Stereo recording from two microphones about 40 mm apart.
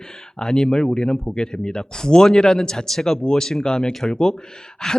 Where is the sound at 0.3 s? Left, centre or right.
Centre.